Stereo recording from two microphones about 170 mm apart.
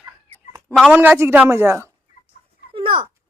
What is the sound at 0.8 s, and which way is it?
A man's voice, 5° right (ahead or behind).